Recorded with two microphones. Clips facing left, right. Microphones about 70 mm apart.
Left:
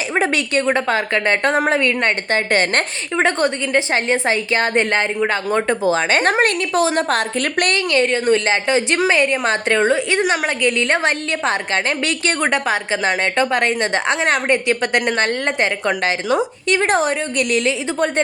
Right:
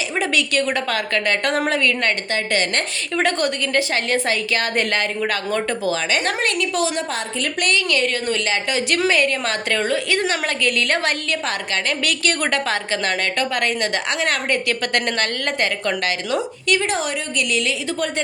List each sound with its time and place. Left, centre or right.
0.1 s a woman's voice: left
3.2 s a woman's voice: left
7.1 s a woman's voice: left
7.9 s a woman's voice: left
16.8 s a woman's voice: left